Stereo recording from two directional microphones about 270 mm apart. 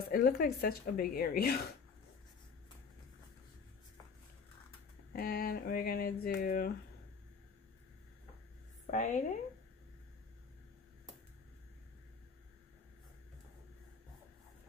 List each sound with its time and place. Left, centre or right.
0.1 s speech: left
5.1 s speech: left
8.9 s speech: left